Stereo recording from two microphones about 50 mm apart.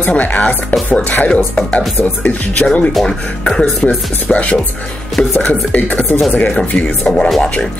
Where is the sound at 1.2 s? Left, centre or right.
Left.